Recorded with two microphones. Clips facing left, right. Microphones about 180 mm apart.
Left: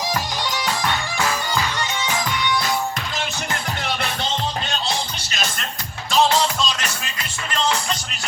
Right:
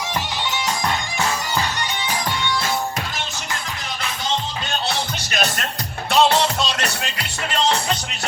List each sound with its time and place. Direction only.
0.9 s music: 30° right (ahead or behind)
4.9 s music: 65° right (ahead or behind)